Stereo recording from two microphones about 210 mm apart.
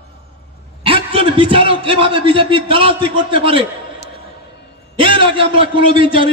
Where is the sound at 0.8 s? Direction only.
25° right (ahead or behind).